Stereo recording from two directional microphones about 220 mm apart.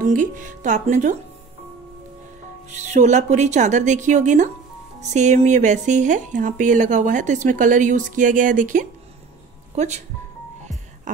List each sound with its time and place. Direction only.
0.0 s speech: 35° right (ahead or behind)
2.8 s speech: 30° right (ahead or behind)